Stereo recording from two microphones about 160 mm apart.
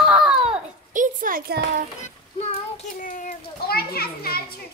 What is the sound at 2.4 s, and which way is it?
Child singing, 40° left (ahead or behind).